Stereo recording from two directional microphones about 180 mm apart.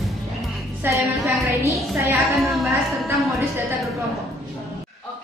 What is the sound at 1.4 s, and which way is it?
Speech, 15° right (ahead or behind).